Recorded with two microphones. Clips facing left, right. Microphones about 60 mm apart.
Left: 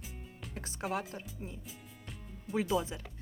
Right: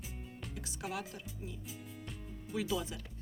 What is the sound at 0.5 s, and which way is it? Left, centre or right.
Music, left.